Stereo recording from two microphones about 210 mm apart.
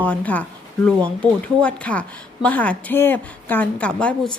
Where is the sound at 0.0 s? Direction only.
5° left (ahead or behind).